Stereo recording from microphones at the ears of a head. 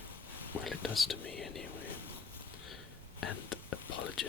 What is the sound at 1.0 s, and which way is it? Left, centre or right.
Speech, left.